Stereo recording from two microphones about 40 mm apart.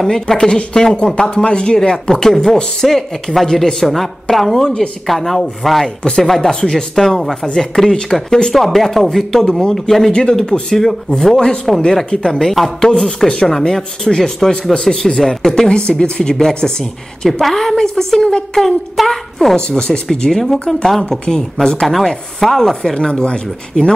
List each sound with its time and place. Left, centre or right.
0.0 s a woman's voice: centre
8.5 s speech: centre
10.5 s speech: left
11.1 s speech: centre
15.7 s speech: left
16.3 s a woman's voice: centre
21.8 s speech: centre; by 23.9 s left